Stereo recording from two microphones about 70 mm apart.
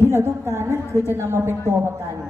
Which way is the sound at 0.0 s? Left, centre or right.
Right.